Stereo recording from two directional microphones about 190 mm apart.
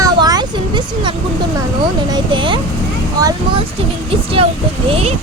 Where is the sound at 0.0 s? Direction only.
20° right (ahead or behind).